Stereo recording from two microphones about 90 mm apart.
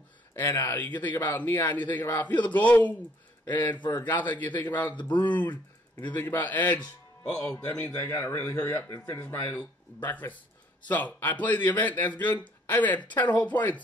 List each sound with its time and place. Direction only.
0.4 s a man's voice: 25° left (ahead or behind)
3.9 s a man's voice: 20° left (ahead or behind)